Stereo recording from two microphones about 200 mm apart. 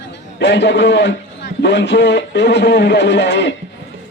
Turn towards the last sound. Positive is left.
turn(degrees=60)  # may be behind; listen again after turning